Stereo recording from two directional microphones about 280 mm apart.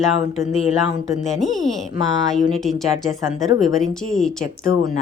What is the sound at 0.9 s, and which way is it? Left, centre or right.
Speech, centre.